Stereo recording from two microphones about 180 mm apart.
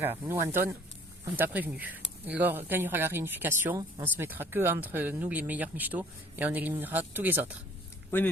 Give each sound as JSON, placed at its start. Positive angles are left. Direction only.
{"t": 0.0, "sound": "speech", "side_deg": -15}